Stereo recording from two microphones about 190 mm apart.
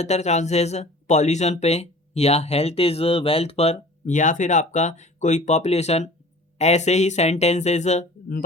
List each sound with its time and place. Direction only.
0.0 s speech: 35° left (ahead or behind)